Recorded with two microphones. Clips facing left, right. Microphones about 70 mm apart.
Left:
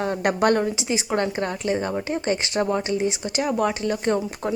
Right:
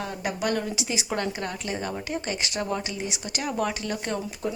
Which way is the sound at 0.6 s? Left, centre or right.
Left.